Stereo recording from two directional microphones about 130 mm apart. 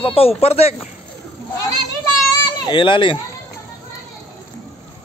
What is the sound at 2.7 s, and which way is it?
Speech, 40° left (ahead or behind).